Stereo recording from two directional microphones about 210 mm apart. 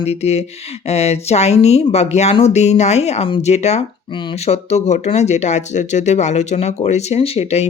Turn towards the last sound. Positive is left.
turn(degrees=30)  # may be behind; listen again after turning